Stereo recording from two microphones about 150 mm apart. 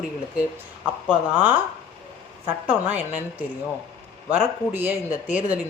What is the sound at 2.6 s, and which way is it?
A woman's voice, 10° right (ahead or behind).